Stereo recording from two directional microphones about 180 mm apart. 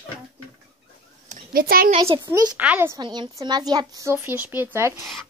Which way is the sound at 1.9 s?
30° right (ahead or behind).